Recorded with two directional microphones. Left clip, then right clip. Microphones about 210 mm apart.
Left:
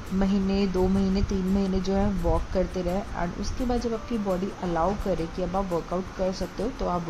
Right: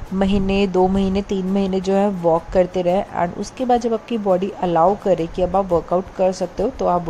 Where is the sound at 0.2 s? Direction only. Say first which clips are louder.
Right 8 dB; 35° right (ahead or behind).